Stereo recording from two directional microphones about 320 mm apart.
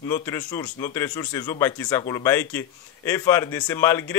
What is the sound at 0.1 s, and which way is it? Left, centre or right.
Speech, centre.